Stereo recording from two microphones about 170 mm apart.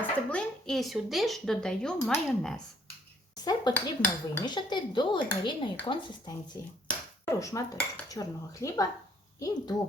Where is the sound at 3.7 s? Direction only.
25° left (ahead or behind).